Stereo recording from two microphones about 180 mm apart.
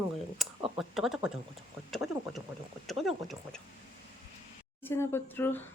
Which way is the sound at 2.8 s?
Centre (ahead or behind).